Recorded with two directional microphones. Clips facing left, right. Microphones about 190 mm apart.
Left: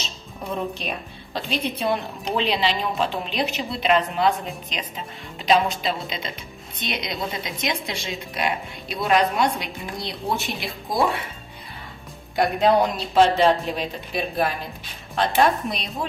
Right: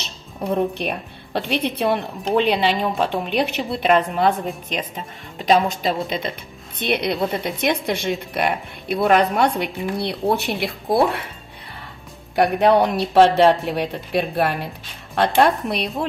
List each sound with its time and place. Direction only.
0.0 s a woman's voice: 60° right (ahead or behind)
2.3 s a woman's voice: 50° right (ahead or behind)
12.4 s a woman's voice: 65° right (ahead or behind)